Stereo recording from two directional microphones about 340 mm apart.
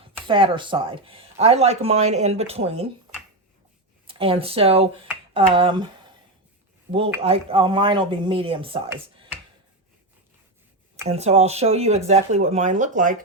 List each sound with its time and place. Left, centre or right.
0.3 s speech: centre
4.0 s speech: centre
6.9 s speech: centre
11.1 s speech: centre